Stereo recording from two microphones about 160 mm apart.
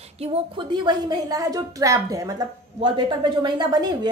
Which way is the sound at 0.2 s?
35° right (ahead or behind).